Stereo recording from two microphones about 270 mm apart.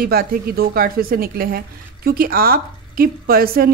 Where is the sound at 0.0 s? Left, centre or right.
Right.